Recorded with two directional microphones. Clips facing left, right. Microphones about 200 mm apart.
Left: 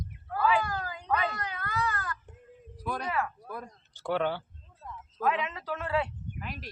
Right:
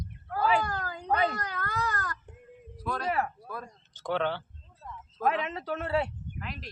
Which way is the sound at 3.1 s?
30° right (ahead or behind).